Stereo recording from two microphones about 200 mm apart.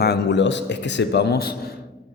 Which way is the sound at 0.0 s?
60° left (ahead or behind).